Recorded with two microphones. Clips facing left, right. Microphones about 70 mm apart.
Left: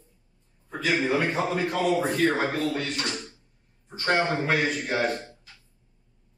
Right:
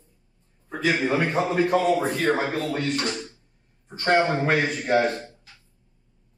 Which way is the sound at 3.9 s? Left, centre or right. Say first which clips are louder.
Right 4 dB; right.